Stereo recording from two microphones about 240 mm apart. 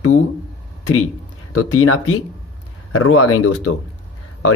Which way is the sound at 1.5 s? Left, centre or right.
Left.